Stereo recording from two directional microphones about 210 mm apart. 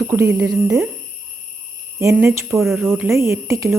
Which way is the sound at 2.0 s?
10° right (ahead or behind).